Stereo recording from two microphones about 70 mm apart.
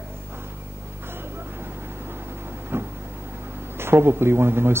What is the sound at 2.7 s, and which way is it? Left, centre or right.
Vehicle, right.